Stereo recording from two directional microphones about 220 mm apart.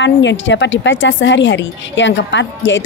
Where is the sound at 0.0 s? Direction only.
55° left (ahead or behind).